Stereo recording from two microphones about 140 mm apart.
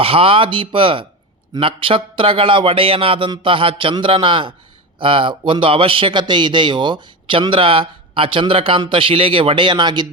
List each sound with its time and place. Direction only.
0.0 s a man's voice: 40° right (ahead or behind)